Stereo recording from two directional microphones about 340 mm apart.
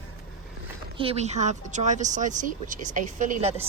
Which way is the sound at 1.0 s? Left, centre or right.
Centre.